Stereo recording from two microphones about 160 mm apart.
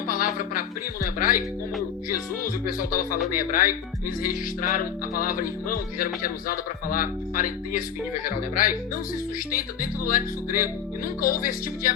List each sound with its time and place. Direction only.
0.1 s music: 60° left (ahead or behind)
1.2 s speech: 60° left (ahead or behind)
5.1 s speech: 60° left (ahead or behind)